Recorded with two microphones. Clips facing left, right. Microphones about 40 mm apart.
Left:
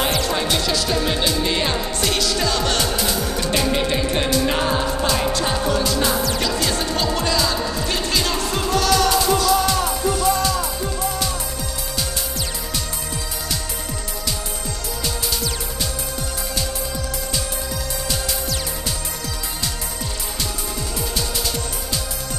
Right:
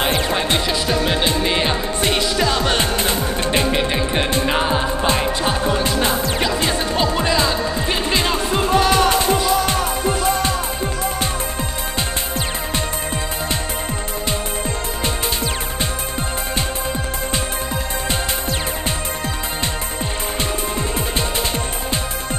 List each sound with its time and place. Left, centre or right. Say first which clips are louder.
0.0 s music: right 2 dB; right
3.0 s music: right 2 dB; right
3.7 s music: right 1 dB; right
5.4 s music: right 1 dB; right